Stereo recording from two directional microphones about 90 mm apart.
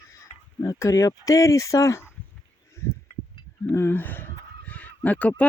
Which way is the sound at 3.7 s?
25° left (ahead or behind).